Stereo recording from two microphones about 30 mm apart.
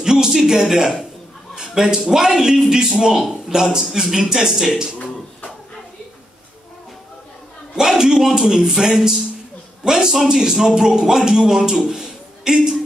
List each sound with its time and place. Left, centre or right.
0.0 s a man's voice: right
7.7 s a man's voice: centre